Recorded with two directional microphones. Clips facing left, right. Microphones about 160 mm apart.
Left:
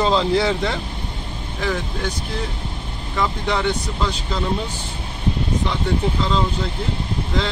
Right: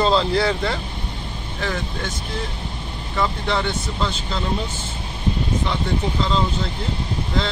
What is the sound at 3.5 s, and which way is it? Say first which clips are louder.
Speech: left 2 dB; 15° left (ahead or behind).